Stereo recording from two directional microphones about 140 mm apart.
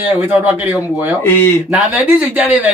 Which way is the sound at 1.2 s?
15° left (ahead or behind).